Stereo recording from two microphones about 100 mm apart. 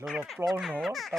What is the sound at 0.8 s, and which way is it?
Music, centre (ahead or behind).